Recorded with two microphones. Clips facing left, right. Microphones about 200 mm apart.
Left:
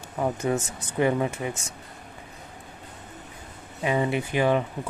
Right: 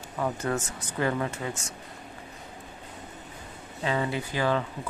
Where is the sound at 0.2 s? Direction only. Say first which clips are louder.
Left 3 dB; 15° left (ahead or behind).